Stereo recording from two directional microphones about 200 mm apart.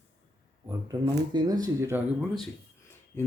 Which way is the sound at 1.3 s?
20° right (ahead or behind).